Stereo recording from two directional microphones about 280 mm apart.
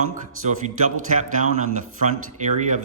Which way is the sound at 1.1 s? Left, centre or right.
Right.